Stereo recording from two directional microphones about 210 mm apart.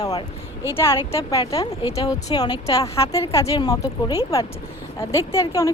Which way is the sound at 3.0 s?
25° left (ahead or behind).